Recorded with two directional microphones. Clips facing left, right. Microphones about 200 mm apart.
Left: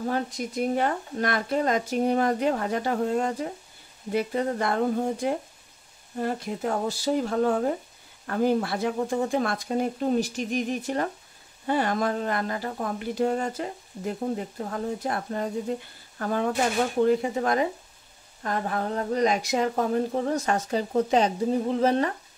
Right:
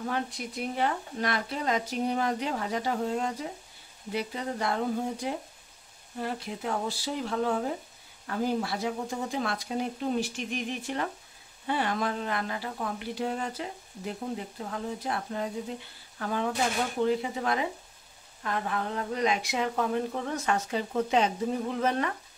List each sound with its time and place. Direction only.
0.0 s speech: 40° left (ahead or behind)